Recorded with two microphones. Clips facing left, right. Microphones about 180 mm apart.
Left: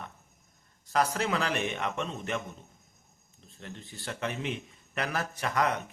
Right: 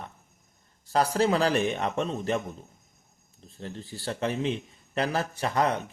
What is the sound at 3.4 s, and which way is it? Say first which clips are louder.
A man's voice: right 6 dB; 35° right (ahead or behind).